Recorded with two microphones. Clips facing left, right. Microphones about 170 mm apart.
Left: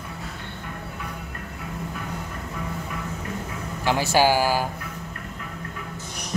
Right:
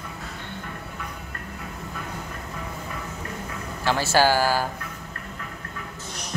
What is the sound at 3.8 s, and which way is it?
Speech, 15° left (ahead or behind).